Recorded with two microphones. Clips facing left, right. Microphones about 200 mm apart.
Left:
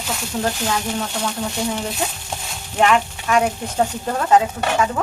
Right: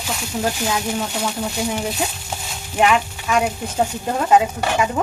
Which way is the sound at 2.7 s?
5° right (ahead or behind).